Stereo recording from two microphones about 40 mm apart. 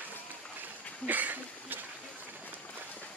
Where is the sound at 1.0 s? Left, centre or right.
Right.